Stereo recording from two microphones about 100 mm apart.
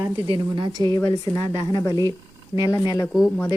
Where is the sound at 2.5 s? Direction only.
30° left (ahead or behind).